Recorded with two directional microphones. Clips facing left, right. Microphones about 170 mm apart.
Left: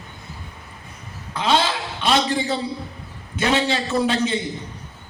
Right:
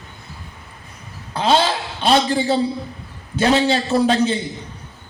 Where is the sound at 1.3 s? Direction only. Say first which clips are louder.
Right 3 dB; 35° right (ahead or behind).